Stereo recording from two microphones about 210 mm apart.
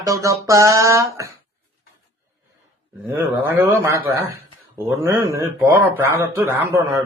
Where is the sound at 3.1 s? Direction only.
10° right (ahead or behind).